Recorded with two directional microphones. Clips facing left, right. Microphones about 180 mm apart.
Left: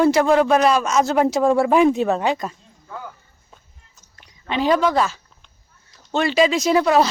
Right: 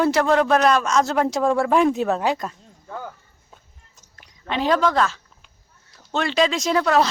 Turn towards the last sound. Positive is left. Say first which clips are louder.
# left 3 dB
turn(degrees=10)  # may be behind; listen again after turning